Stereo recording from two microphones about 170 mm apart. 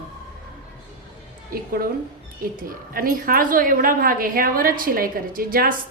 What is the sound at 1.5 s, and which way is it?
A woman's voice, 60° right (ahead or behind).